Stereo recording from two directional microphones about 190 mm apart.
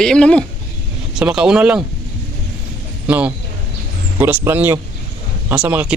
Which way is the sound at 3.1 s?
5° right (ahead or behind).